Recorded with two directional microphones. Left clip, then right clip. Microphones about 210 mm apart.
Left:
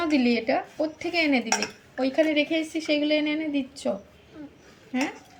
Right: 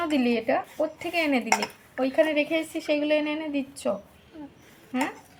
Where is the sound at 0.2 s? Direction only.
5° right (ahead or behind).